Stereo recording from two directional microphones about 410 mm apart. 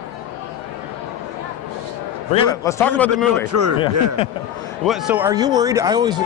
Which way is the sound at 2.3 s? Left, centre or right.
Centre.